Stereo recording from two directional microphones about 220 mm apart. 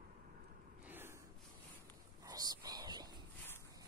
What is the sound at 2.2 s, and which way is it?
Whispering, 15° right (ahead or behind).